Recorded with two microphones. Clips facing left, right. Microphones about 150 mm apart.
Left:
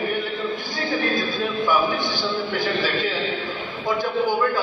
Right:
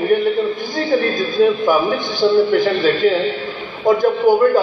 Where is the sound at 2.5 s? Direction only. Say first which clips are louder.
Right 9 dB; 50° right (ahead or behind).